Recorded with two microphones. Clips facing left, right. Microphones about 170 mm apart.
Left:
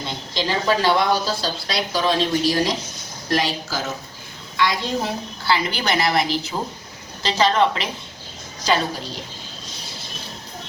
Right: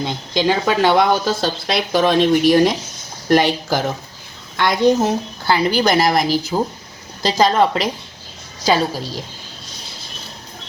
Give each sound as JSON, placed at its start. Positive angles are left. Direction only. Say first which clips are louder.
{"t": 0.0, "sound": "a woman's voice", "louder": "right 7 dB", "side_deg": -55}